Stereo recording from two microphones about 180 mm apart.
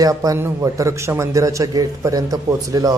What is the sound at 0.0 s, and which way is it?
A man's voice, 20° right (ahead or behind).